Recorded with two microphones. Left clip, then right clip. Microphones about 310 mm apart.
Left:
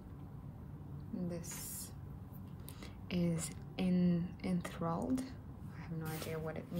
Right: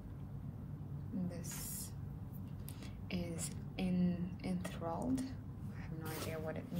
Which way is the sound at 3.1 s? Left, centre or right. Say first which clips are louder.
Left 5 dB; left.